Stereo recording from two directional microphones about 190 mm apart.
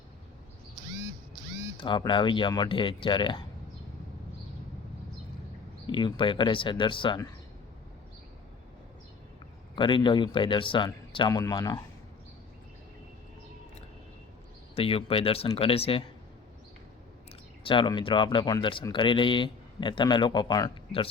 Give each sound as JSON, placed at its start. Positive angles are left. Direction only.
{"t": 1.8, "sound": "speech", "side_deg": 25}
{"t": 5.8, "sound": "speech", "side_deg": 25}
{"t": 9.7, "sound": "speech", "side_deg": 25}
{"t": 14.8, "sound": "speech", "side_deg": 30}
{"t": 17.6, "sound": "speech", "side_deg": 25}